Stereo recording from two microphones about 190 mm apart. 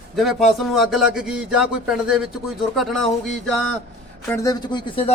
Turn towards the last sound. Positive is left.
turn(degrees=25)  # may be behind; listen again after turning